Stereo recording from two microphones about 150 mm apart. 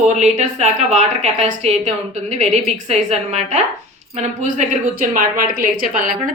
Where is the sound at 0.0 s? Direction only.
50° right (ahead or behind).